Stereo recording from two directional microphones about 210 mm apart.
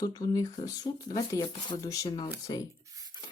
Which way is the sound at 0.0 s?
15° left (ahead or behind).